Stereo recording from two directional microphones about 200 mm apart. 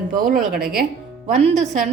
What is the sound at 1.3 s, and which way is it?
Speech, 35° right (ahead or behind).